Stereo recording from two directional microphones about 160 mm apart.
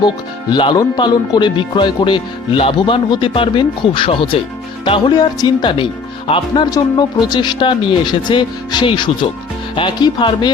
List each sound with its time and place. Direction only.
0.5 s speech: 30° left (ahead or behind)